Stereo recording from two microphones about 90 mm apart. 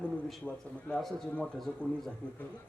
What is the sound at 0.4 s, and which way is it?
Speech, 15° left (ahead or behind).